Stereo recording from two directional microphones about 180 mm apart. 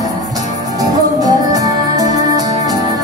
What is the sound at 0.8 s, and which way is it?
Music, 20° right (ahead or behind).